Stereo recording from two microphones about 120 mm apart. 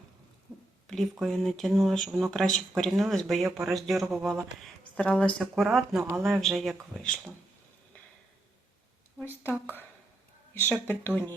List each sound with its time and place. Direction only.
0.9 s a sound: 5° left (ahead or behind)
1.3 s speech: 5° left (ahead or behind)
4.9 s speech: 10° left (ahead or behind)
10.5 s speech: 15° left (ahead or behind)